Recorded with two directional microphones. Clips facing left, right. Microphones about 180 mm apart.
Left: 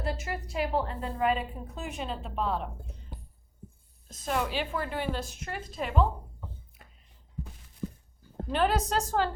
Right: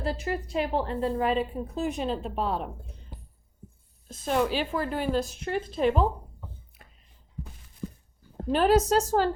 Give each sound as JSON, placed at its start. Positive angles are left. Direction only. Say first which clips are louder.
{"t": 0.0, "sound": "a woman's voice", "louder": "right 4 dB", "side_deg": -30}
{"t": 4.1, "sound": "a woman's voice", "louder": "right 5 dB", "side_deg": -35}
{"t": 5.5, "sound": "a woman's voice", "louder": "right 11 dB", "side_deg": -30}
{"t": 8.5, "sound": "a woman's voice", "louder": "right 6 dB", "side_deg": -40}